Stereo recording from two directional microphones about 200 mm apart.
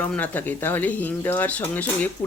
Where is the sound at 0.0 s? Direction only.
10° left (ahead or behind).